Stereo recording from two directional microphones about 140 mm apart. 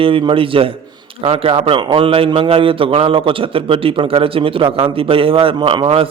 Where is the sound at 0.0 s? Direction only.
40° right (ahead or behind).